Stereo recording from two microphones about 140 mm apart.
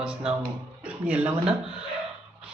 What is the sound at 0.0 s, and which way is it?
Speech, 10° right (ahead or behind).